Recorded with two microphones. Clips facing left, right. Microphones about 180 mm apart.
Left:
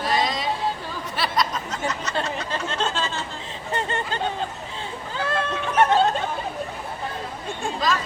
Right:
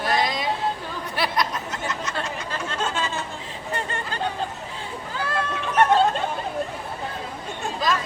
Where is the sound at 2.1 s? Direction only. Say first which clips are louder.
Left 3 dB; 25° left (ahead or behind).